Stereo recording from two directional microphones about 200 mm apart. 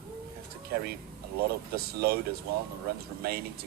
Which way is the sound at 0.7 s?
50° right (ahead or behind).